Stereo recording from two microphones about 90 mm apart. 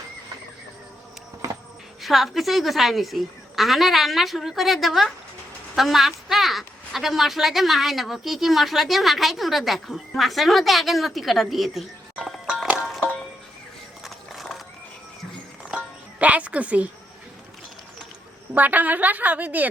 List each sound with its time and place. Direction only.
2.0 s a woman's voice: centre (ahead or behind)
14.0 s a sound: centre (ahead or behind)
15.7 s music: 15° right (ahead or behind)
18.5 s a woman's voice: 20° right (ahead or behind)